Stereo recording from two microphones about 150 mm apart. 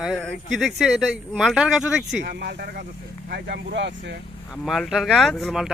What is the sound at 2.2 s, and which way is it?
Speech, 90° right.